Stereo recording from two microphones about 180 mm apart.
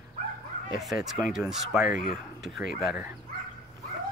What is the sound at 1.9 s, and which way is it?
Speech, 50° left (ahead or behind).